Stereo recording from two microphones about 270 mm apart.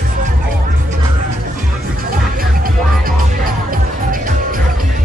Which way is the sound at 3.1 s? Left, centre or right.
Right.